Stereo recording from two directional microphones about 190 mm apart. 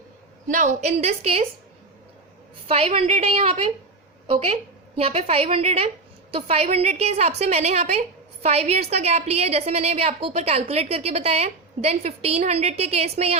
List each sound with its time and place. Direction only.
0.4 s a woman's voice: 40° right (ahead or behind)
2.6 s a woman's voice: 30° right (ahead or behind)